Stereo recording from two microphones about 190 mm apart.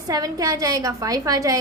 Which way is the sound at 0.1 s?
20° right (ahead or behind).